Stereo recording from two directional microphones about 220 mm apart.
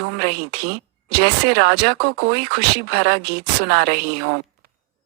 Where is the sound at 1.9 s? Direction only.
45° right (ahead or behind).